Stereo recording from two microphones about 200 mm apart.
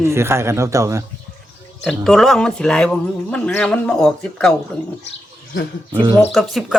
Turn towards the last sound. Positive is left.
turn(degrees=0)  # may be behind; listen again after turning